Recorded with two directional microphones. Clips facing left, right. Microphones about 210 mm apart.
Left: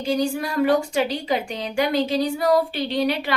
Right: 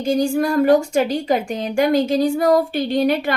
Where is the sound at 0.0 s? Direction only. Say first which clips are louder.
Right 5 dB; 45° right (ahead or behind).